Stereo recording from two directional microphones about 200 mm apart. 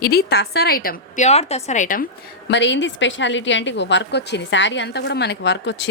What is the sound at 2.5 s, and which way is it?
A woman's voice, 65° left (ahead or behind).